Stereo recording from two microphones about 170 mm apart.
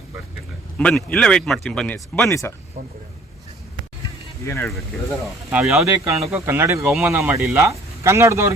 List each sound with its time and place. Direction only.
0.8 s speech: 5° left (ahead or behind)
4.4 s speech: 15° left (ahead or behind)
5.5 s speech: 10° right (ahead or behind)
6.8 s speech: centre (ahead or behind)
7.3 s speech: 15° right (ahead or behind)